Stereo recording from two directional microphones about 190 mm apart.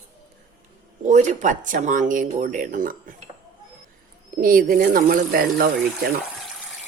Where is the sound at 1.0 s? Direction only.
40° right (ahead or behind).